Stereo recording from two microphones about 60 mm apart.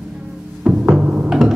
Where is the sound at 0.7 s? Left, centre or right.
Centre.